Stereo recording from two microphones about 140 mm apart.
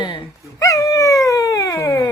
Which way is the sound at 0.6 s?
20° left (ahead or behind).